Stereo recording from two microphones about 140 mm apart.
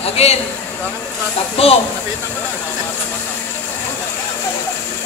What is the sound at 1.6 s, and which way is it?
Speech, 45° left (ahead or behind).